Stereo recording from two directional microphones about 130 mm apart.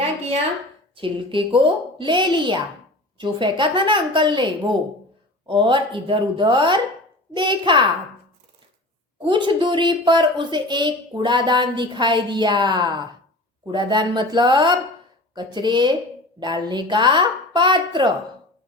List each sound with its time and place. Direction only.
0.9 s speech: 40° right (ahead or behind)
9.2 s speech: 40° right (ahead or behind)